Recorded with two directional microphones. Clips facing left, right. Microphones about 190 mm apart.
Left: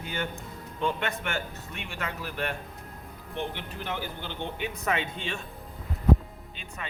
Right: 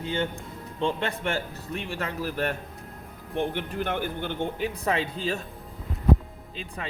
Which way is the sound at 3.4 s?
50° right (ahead or behind).